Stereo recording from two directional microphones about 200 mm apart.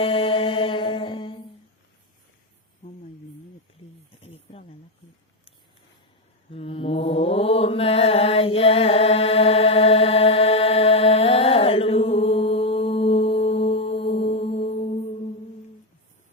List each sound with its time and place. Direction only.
0.0 s mantra: 25° left (ahead or behind)
4.2 s snake: 30° left (ahead or behind)
6.5 s mantra: 30° left (ahead or behind)